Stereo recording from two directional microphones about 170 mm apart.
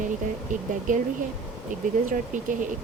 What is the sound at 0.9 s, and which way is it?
Speech, 50° right (ahead or behind).